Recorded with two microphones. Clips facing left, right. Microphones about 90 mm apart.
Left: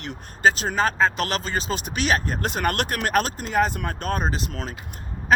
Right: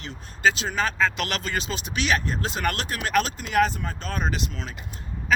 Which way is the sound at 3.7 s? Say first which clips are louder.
Left 4 dB; 55° left (ahead or behind).